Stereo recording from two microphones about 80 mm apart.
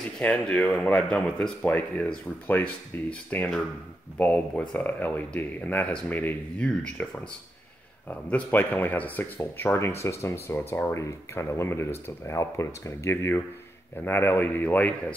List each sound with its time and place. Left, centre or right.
0.2 s speech: centre
8.1 s speech: left